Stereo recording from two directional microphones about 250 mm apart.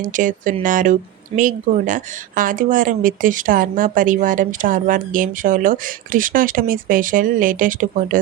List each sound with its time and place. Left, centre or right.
0.0 s speech: right